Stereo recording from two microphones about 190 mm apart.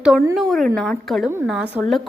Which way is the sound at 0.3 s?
Centre (ahead or behind).